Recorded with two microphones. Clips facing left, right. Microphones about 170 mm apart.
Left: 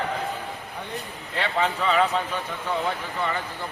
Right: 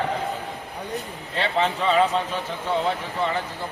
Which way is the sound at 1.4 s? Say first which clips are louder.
Right 2 dB; 30° right (ahead or behind).